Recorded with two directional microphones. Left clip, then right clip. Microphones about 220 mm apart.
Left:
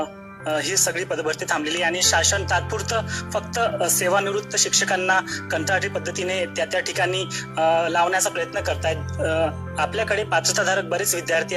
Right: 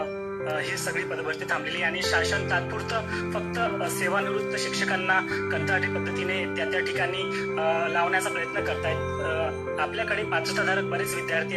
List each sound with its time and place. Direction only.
0.5 s speech: 50° left (ahead or behind)